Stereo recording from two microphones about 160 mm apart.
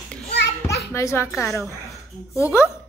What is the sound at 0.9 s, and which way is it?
Speech, 15° left (ahead or behind).